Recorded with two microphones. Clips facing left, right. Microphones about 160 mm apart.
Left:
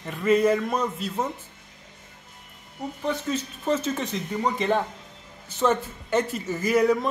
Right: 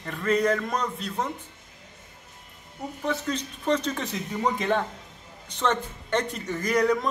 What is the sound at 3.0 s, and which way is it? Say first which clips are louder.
Speech: left 1 dB; 5° left (ahead or behind).